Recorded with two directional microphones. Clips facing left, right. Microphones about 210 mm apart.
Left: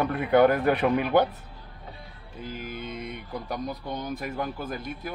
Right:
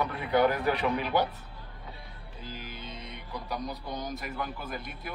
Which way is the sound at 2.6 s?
55° left (ahead or behind).